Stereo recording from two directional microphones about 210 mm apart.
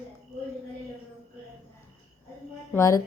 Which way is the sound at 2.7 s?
15° left (ahead or behind).